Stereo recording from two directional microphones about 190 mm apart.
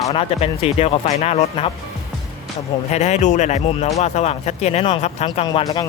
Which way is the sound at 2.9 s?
35° left (ahead or behind).